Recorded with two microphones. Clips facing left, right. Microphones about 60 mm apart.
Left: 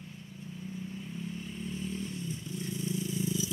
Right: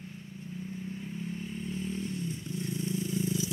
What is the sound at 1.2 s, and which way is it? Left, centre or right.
Vehicle, right.